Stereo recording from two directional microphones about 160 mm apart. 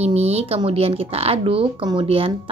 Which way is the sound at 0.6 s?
40° right (ahead or behind).